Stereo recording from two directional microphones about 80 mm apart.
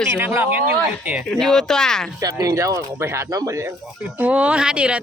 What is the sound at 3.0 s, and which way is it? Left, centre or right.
Speech, right.